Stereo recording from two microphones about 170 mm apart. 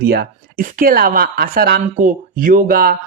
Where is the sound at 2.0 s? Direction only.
50° right (ahead or behind).